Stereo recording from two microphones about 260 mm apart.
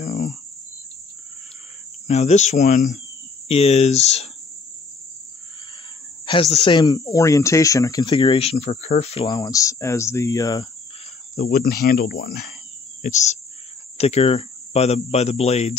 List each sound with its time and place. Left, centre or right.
0.0 s cricket: left
2.0 s speech: left
6.2 s speech: left
11.3 s cricket: left
13.0 s speech: left